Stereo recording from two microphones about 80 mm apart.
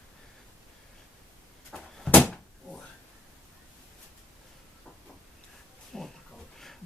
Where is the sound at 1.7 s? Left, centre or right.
Centre.